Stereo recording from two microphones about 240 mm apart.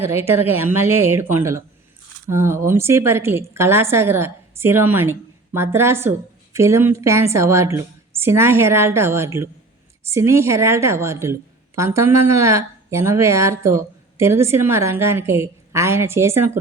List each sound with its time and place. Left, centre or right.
0.0 s a woman's voice: centre